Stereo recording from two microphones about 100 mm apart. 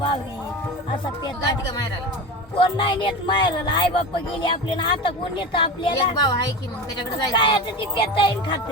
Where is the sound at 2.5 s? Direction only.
55° left (ahead or behind).